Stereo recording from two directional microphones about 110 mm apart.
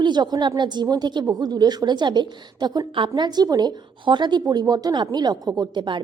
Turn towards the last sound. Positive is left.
turn(degrees=-40)  # may be behind; listen again after turning